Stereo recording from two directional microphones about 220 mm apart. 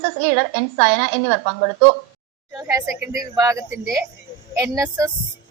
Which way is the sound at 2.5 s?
15° right (ahead or behind).